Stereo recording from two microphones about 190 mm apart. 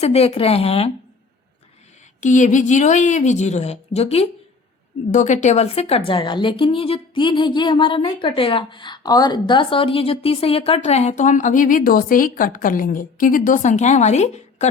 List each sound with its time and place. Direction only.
0.0 s a woman's voice: 35° left (ahead or behind)
2.2 s a woman's voice: 40° left (ahead or behind)